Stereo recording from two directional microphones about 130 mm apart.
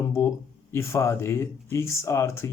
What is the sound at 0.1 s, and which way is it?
Speech, 20° left (ahead or behind).